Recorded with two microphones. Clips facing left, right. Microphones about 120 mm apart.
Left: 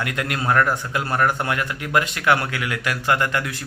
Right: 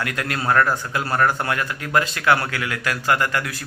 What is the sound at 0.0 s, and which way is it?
A man's voice, 20° left (ahead or behind).